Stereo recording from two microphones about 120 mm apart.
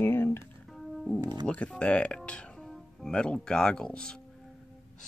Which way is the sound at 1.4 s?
10° left (ahead or behind).